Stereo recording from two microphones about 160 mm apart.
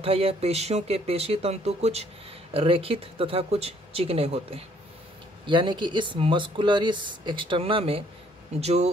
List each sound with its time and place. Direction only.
0.0 s speech: 35° right (ahead or behind)